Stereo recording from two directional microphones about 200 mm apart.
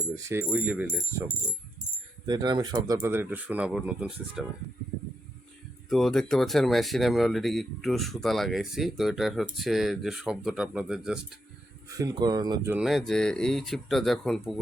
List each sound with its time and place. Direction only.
0.3 s speech: 10° right (ahead or behind)
2.2 s speech: 20° right (ahead or behind); by 4.4 s 5° right (ahead or behind)
5.9 s speech: centre (ahead or behind)
11.9 s speech: 15° right (ahead or behind)
12.7 s speech: centre (ahead or behind)